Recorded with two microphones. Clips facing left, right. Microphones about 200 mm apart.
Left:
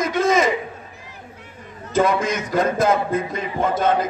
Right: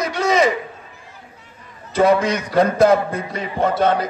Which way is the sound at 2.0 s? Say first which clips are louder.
Right 3 dB; 50° left (ahead or behind).